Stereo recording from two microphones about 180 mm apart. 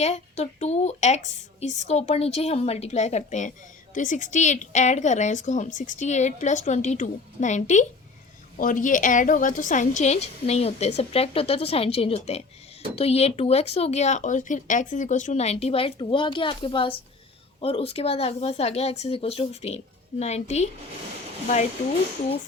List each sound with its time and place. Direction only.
0.0 s speech: 40° left (ahead or behind)